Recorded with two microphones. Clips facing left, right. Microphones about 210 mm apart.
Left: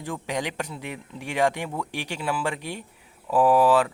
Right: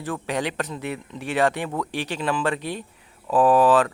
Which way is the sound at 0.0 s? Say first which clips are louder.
Right 3 dB; 15° left (ahead or behind).